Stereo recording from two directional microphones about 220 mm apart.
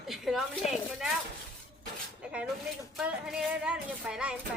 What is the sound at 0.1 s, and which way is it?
Speech, centre (ahead or behind).